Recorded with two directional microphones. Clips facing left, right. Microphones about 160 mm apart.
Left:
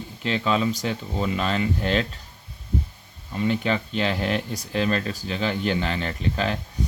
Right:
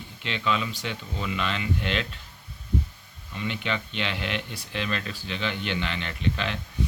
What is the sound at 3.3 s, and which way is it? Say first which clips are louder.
Speech: left 7 dB; 40° left (ahead or behind).